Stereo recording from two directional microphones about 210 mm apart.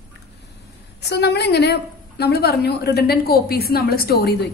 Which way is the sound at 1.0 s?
50° left (ahead or behind).